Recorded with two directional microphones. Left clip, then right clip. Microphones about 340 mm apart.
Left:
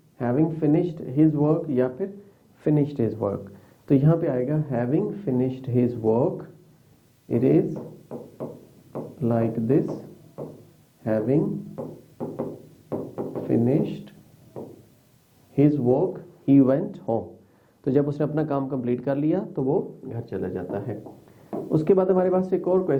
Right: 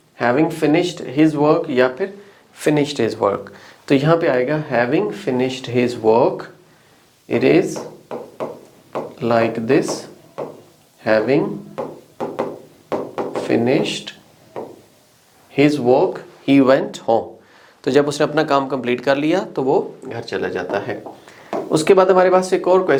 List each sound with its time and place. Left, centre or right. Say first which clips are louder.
0.2 s speech: right 8 dB; centre
7.3 s a sound: right 6 dB; centre
10.0 s drawer open or close: right 9 dB; centre
11.0 s knock: right 8 dB; centre
15.5 s speech: right 7 dB; centre
19.6 s speech: right 7 dB; centre